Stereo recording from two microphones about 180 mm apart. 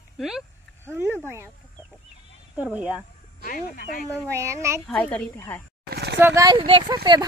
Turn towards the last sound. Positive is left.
turn(degrees=-20)  # may be behind; listen again after turning